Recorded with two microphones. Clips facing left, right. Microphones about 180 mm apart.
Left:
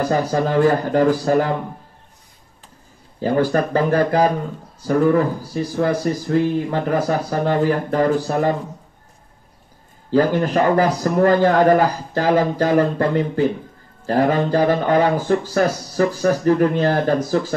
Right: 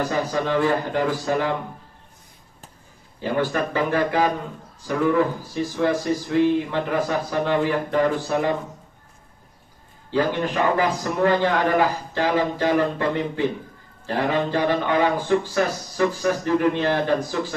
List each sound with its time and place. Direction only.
0.0 s a man's voice: 40° left (ahead or behind)
3.2 s a man's voice: 40° left (ahead or behind)
10.1 s a man's voice: 40° left (ahead or behind)